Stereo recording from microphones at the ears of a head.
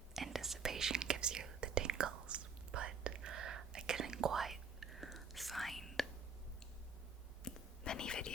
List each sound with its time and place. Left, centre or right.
0.3 s whispering: right
5.1 s whispering: centre
7.4 s whispering: left